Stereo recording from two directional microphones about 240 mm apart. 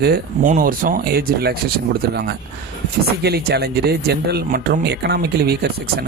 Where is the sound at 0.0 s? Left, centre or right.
Right.